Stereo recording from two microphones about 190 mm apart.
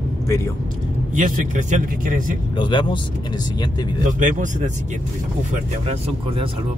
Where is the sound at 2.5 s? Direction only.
25° left (ahead or behind).